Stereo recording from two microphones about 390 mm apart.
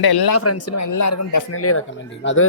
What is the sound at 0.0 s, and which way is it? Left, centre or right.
Speech, left.